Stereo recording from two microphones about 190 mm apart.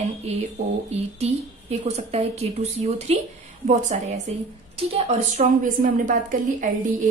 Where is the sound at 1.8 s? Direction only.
35° right (ahead or behind).